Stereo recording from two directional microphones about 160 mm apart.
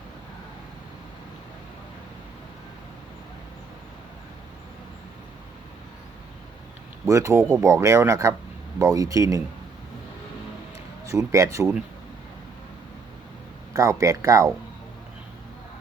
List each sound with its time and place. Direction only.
7.0 s a man's voice: 20° right (ahead or behind)
11.1 s a man's voice: 20° right (ahead or behind)
13.7 s a man's voice: 20° right (ahead or behind)